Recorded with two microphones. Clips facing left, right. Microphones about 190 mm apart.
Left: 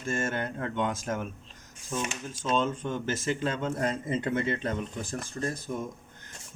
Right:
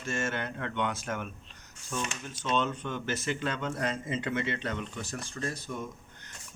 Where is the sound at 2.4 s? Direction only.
45° left (ahead or behind).